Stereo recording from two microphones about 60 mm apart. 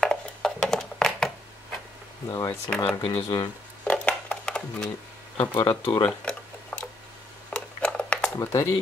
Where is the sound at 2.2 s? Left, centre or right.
Left.